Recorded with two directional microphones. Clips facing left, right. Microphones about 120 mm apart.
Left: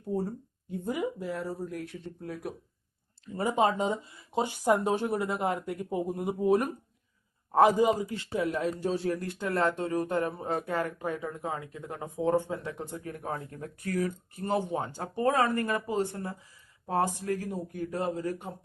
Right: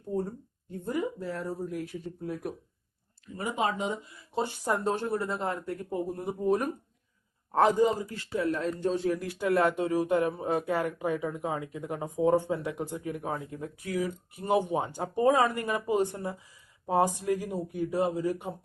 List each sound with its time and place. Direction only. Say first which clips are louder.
0.1 s speech: even; 5° left (ahead or behind)
3.3 s speech: left 4 dB; 35° left (ahead or behind)
4.3 s speech: left 3 dB; 15° left (ahead or behind)
8.5 s a man's voice: even; 5° left (ahead or behind); by 18.5 s 15° right (ahead or behind)